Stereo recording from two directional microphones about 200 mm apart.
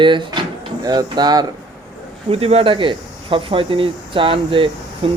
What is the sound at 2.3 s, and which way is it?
Speech, 30° right (ahead or behind).